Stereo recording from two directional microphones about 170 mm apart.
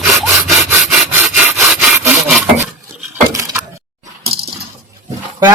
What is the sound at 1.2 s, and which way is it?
Sawing, 5° right (ahead or behind).